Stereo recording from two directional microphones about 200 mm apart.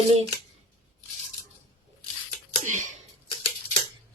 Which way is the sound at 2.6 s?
40° right (ahead or behind).